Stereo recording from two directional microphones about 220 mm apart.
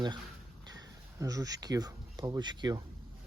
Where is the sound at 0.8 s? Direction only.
15° right (ahead or behind).